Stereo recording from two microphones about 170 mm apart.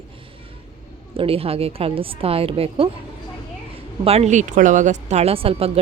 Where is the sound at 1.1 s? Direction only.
35° right (ahead or behind).